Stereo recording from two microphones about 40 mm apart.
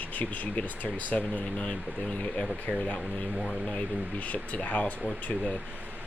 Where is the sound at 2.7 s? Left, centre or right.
Centre.